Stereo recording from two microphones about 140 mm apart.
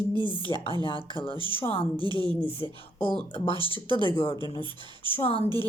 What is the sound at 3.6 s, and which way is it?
Speech, 35° right (ahead or behind).